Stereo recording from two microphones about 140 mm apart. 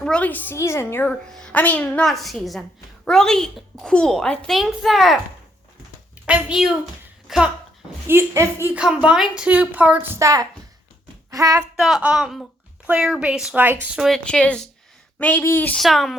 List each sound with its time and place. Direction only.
0.0 s a woman's voice: 10° left (ahead or behind)
1.3 s a woman's voice: 5° left (ahead or behind)
6.2 s speech: 5° right (ahead or behind)
8.0 s a woman's voice: 20° right (ahead or behind)
8.8 s a woman's voice: 5° right (ahead or behind)
10.2 s speech: 25° right (ahead or behind)
11.8 s speech: 5° right (ahead or behind)
14.3 s a woman's voice: 5° left (ahead or behind)
15.8 s speech: centre (ahead or behind)